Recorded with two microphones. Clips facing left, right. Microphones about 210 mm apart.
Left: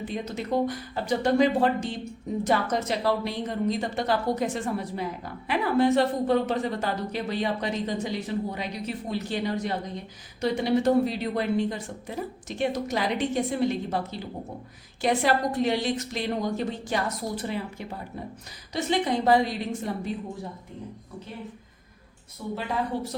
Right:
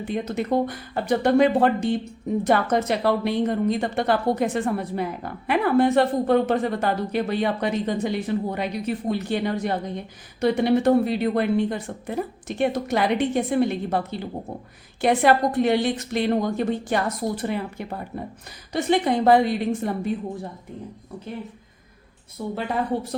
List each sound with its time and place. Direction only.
0.1 s a woman's voice: 55° right (ahead or behind)
22.4 s a woman's voice: 50° right (ahead or behind)